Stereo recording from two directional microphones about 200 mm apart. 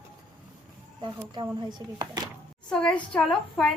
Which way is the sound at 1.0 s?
20° right (ahead or behind).